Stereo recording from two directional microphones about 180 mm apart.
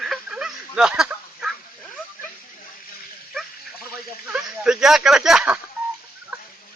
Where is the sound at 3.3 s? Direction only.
Centre (ahead or behind).